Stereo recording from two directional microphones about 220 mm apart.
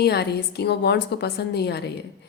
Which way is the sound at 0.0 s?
50° left (ahead or behind).